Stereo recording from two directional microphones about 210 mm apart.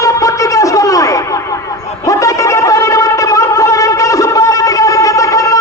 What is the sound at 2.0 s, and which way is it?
Shofar, 15° left (ahead or behind).